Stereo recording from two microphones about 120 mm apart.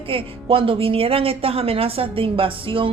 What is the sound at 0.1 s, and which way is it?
A woman's voice, 50° right (ahead or behind).